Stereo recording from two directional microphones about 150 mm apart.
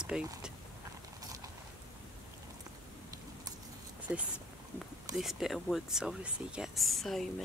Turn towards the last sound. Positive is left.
turn(degrees=0)  # may be behind; listen again after turning